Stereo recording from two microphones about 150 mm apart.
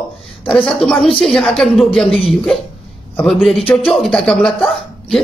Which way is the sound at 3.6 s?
35° left (ahead or behind).